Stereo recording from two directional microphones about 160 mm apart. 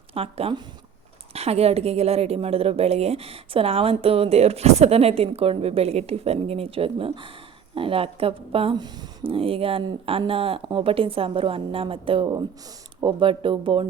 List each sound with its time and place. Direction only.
0.1 s a woman's voice: 35° right (ahead or behind)